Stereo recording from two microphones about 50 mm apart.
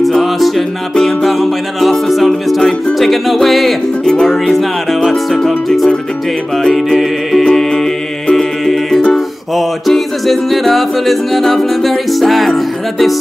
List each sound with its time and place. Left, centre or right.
0.2 s music: centre
4.0 s music: centre
4.3 s music: centre
6.6 s music: centre